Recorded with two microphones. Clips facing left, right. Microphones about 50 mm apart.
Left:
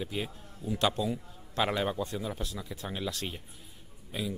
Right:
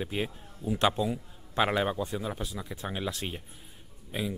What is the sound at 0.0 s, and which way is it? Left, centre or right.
A man's voice, right.